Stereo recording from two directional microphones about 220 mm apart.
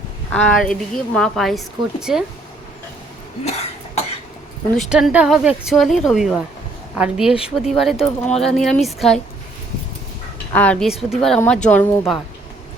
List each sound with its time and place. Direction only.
0.3 s speech: 5° left (ahead or behind)
3.4 s cough: 30° left (ahead or behind)
4.8 s speech: centre (ahead or behind)
10.5 s speech: 5° left (ahead or behind)